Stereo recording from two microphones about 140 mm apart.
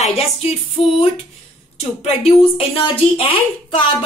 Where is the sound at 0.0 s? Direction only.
50° left (ahead or behind).